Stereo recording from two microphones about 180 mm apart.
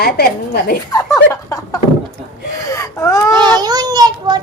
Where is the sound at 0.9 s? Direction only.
20° left (ahead or behind).